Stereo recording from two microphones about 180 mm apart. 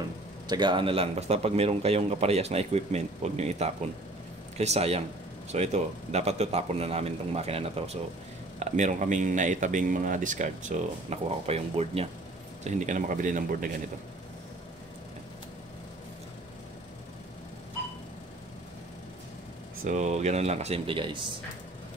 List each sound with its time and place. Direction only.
0.5 s a man's voice: 25° right (ahead or behind); by 13.7 s 50° right (ahead or behind)
19.8 s a man's voice: 40° right (ahead or behind)